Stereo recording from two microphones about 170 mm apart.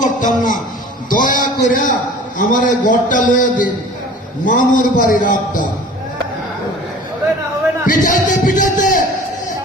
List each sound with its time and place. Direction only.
0.0 s a man's voice: 50° left (ahead or behind)
7.9 s speech: 50° left (ahead or behind)